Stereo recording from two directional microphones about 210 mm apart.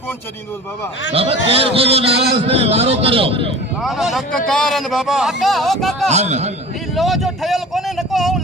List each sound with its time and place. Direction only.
1.1 s a man's voice: 25° right (ahead or behind)
3.8 s a man's voice: centre (ahead or behind)
6.1 s a man's voice: 30° right (ahead or behind)
6.9 s a man's voice: centre (ahead or behind)